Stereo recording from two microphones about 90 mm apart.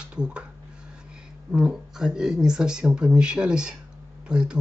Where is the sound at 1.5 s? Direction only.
10° right (ahead or behind).